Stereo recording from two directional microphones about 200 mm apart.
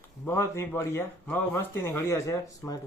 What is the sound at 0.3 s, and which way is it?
Speech, 15° left (ahead or behind).